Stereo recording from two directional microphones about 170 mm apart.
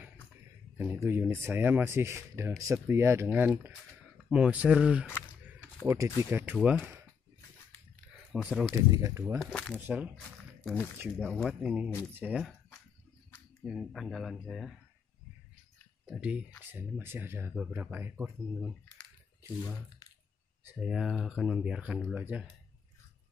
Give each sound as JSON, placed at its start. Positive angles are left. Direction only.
{"t": 0.7, "sound": "speech", "side_deg": -15}
{"t": 5.0, "sound": "single-lens reflex camera", "side_deg": 10}
{"t": 5.9, "sound": "speech", "side_deg": -20}
{"t": 8.1, "sound": "speech", "side_deg": -5}
{"t": 8.9, "sound": "speech", "side_deg": -15}
{"t": 9.4, "sound": "speech", "side_deg": 5}
{"t": 9.8, "sound": "speech", "side_deg": -10}
{"t": 10.6, "sound": "speech", "side_deg": 0}
{"t": 16.1, "sound": "speech", "side_deg": -5}
{"t": 20.7, "sound": "speech", "side_deg": -5}